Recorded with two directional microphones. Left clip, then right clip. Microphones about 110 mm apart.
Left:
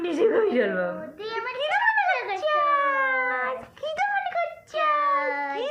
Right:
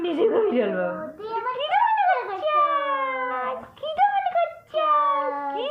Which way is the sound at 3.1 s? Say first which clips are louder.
Left 2 dB; 55° left (ahead or behind).